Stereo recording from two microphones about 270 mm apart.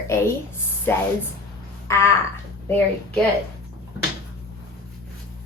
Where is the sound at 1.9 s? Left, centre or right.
Centre.